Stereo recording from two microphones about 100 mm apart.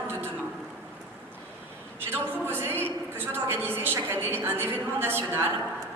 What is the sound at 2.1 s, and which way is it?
A woman's voice, 25° right (ahead or behind).